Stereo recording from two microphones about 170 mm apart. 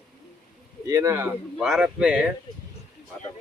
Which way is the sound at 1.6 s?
Centre (ahead or behind).